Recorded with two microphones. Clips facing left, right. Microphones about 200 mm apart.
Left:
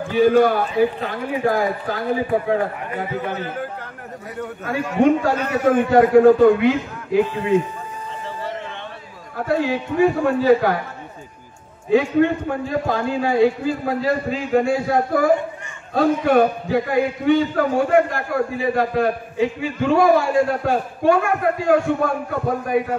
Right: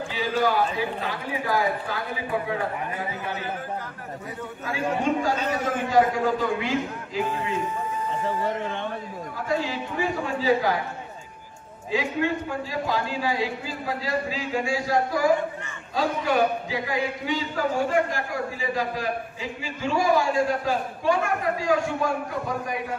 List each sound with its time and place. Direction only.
0.1 s a man's voice: 55° left (ahead or behind)
5.0 s a man's voice: 60° left (ahead or behind)
9.5 s a man's voice: 60° left (ahead or behind)
11.9 s a man's voice: 55° left (ahead or behind)